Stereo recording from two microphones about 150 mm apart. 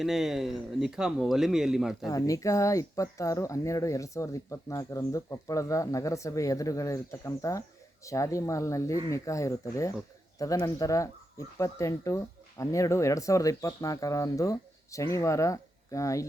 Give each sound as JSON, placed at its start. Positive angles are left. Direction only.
{"t": 0.0, "sound": "speech", "side_deg": 0}
{"t": 2.0, "sound": "speech", "side_deg": 25}